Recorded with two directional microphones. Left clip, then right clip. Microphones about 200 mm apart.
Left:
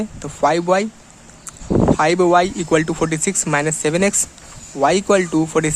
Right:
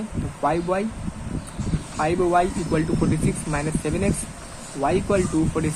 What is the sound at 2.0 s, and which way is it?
Speech, 50° left (ahead or behind).